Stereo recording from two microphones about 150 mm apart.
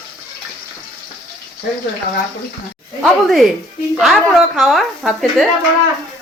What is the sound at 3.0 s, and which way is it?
Speech, centre (ahead or behind).